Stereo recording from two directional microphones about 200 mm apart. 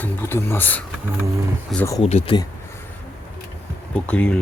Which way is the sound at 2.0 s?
30° left (ahead or behind).